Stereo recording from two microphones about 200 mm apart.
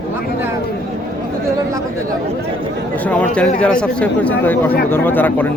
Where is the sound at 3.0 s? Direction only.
5° left (ahead or behind).